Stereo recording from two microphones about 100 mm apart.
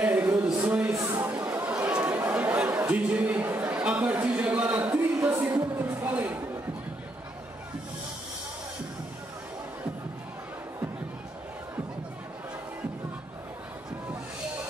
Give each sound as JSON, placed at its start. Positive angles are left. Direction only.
{"t": 0.0, "sound": "a sound", "side_deg": -15}
{"t": 1.0, "sound": "chatter", "side_deg": -20}
{"t": 5.1, "sound": "music", "side_deg": -30}